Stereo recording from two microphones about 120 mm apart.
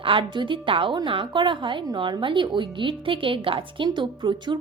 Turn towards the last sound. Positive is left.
turn(degrees=-40)  # may be behind; listen again after turning